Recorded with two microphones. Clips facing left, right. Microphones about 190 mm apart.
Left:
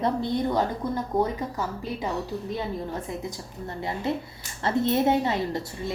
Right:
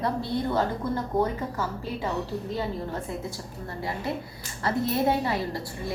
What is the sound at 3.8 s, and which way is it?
A woman's voice, 25° left (ahead or behind).